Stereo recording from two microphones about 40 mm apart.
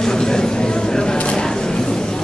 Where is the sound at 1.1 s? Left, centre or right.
Left.